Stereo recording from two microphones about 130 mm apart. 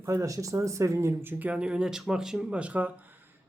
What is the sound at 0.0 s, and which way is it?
Speech, 20° right (ahead or behind).